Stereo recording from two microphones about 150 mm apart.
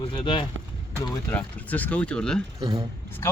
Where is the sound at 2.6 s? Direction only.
30° right (ahead or behind).